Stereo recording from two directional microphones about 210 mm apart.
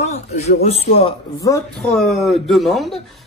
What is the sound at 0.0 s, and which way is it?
Speech, 35° left (ahead or behind).